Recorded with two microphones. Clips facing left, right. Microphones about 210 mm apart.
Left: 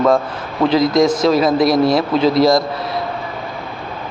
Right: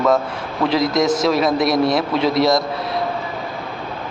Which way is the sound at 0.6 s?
20° left (ahead or behind).